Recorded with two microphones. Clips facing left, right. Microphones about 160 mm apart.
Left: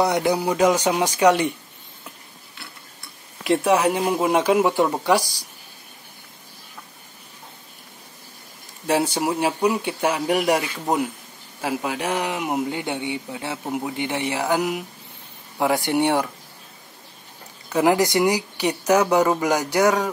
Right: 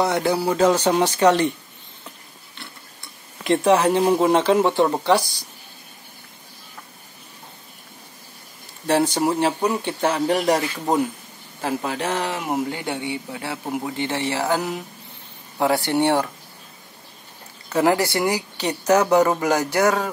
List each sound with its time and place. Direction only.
0.0 s speech: 20° left (ahead or behind)
3.4 s speech: 10° left (ahead or behind)
8.8 s speech: 10° left (ahead or behind)
17.7 s speech: 15° left (ahead or behind)